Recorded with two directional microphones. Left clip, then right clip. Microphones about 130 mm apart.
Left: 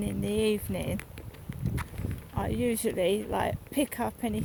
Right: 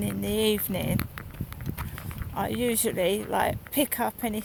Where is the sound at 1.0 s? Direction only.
40° right (ahead or behind).